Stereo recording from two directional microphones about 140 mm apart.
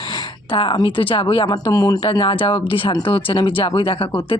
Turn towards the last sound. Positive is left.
turn(degrees=40)  # may be behind; listen again after turning